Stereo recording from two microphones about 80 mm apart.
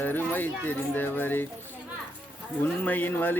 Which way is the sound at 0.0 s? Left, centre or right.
Left.